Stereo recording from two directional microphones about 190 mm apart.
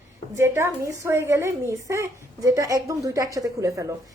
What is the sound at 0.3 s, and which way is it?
A woman's voice, 15° right (ahead or behind).